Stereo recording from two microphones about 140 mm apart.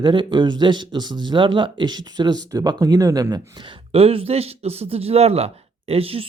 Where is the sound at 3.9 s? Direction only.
45° right (ahead or behind).